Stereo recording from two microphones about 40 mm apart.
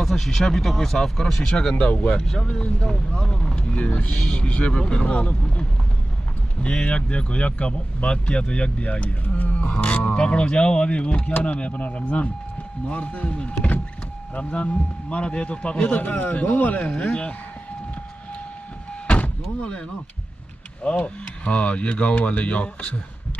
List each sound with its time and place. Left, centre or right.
0.0 s speech: centre
1.4 s speech: centre
1.8 s speech: left
3.7 s speech: left
4.2 s speech: left
6.6 s speech: left
9.6 s speech: left
14.3 s speech: left
16.0 s a man's voice: left
16.9 s speech: left
19.0 s vehicle: left
20.8 s speech: left